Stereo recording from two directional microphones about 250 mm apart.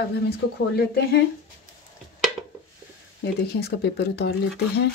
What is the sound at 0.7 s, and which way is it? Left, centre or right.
Speech, left.